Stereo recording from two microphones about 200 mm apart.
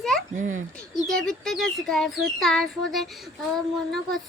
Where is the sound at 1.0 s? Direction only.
Centre (ahead or behind).